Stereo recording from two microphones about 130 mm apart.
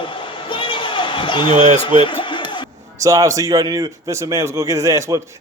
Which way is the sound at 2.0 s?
40° left (ahead or behind).